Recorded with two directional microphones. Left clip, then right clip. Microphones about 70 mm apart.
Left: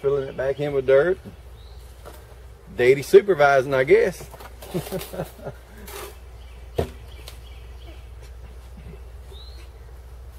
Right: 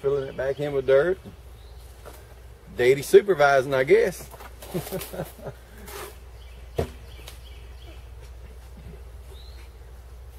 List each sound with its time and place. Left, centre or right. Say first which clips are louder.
0.0 s speech: left 2 dB; centre
2.7 s speech: left 2 dB; centre
4.4 s bird: left 2 dB; centre
6.7 s chop: left 2 dB; centre